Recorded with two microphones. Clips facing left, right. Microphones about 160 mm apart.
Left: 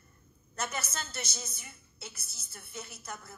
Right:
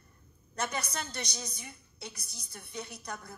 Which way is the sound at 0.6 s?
5° left (ahead or behind).